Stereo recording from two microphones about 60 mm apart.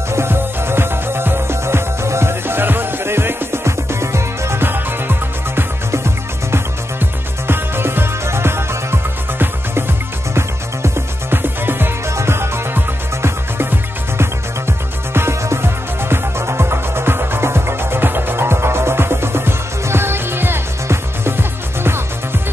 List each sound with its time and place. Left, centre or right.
0.1 s music: right
5.9 s music: right